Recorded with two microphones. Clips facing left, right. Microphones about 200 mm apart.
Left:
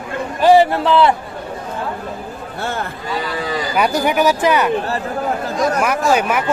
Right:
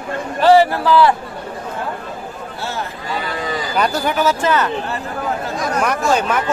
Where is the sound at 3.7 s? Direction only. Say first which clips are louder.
Left 2 dB; 15° left (ahead or behind).